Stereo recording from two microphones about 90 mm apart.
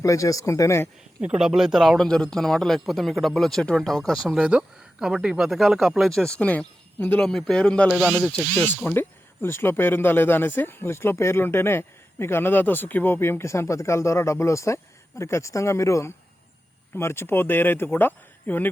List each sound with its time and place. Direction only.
0.0 s speech: 40° left (ahead or behind)
1.2 s speech: 10° right (ahead or behind); by 7.9 s 10° left (ahead or behind)
7.9 s a sound: 5° right (ahead or behind)
8.5 s speech: 20° left (ahead or behind)